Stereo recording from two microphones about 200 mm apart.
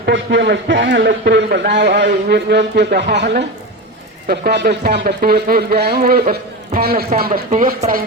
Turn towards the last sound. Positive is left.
turn(degrees=-40)  # may be behind; listen again after turning